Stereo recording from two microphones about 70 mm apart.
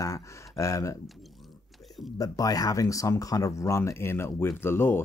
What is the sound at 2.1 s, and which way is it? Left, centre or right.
Speech, left.